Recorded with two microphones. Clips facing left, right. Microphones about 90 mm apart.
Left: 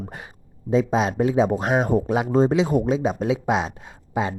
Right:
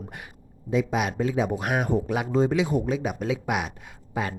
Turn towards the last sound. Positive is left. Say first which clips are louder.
# left 5 dB
turn(degrees=25)  # may be behind; listen again after turning